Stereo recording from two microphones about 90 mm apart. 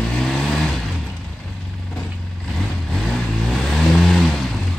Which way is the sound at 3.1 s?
Centre (ahead or behind).